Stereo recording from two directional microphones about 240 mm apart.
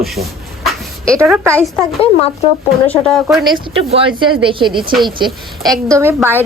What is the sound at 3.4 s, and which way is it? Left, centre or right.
A woman's voice, right.